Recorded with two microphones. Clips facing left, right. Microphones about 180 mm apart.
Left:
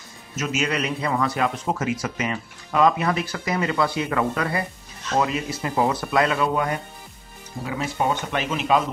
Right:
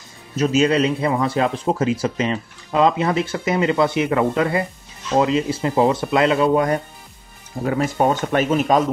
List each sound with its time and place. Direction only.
0.4 s a man's voice: 35° right (ahead or behind)
7.6 s speech: 50° right (ahead or behind)